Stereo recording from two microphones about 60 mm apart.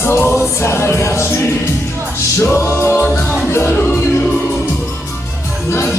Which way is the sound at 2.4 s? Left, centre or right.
Left.